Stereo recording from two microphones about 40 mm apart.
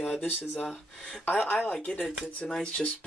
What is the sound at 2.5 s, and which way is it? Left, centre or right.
Speech, left.